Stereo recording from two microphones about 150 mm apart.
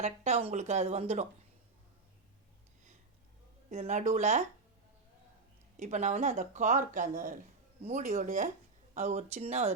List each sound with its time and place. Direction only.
0.0 s speech: 45° right (ahead or behind)
3.7 s speech: 50° right (ahead or behind)
5.7 s speech: 55° right (ahead or behind)